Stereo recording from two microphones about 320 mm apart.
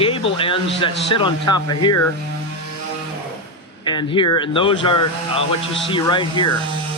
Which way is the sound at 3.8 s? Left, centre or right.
Centre.